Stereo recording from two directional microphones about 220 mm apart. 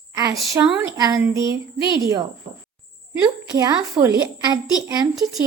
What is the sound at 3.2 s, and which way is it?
A child's voice, 15° right (ahead or behind).